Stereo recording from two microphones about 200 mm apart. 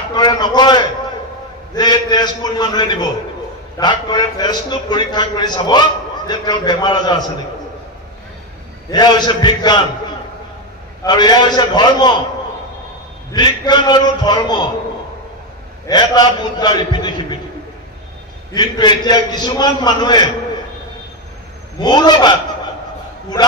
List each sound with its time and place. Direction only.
0.1 s a man's voice: 20° left (ahead or behind)
8.9 s a man's voice: 20° left (ahead or behind)
11.1 s a man's voice: 20° left (ahead or behind)
13.3 s a man's voice: 20° left (ahead or behind)
15.9 s a man's voice: 20° left (ahead or behind)
18.5 s a man's voice: 20° left (ahead or behind)
21.8 s a man's voice: 20° left (ahead or behind)